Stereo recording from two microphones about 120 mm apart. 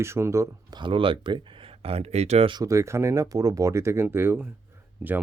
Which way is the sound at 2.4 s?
35° right (ahead or behind).